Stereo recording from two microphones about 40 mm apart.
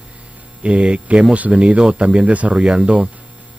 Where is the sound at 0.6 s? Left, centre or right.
Right.